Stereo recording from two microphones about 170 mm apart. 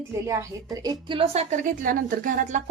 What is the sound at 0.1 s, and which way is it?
A woman's voice, 15° right (ahead or behind).